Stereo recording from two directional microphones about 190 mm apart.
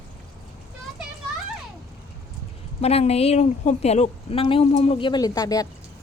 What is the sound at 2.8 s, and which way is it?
Speech, 35° left (ahead or behind).